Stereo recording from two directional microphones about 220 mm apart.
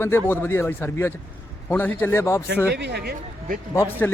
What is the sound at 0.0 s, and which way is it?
Speech, 10° left (ahead or behind).